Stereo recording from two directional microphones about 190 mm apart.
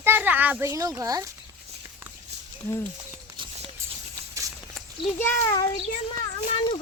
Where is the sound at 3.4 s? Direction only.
25° right (ahead or behind).